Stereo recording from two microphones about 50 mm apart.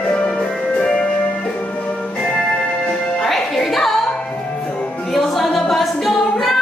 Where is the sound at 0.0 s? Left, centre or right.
Left.